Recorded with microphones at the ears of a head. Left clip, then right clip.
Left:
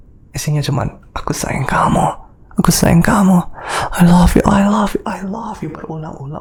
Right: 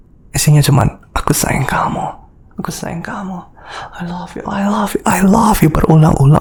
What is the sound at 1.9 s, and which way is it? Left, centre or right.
Speech, left.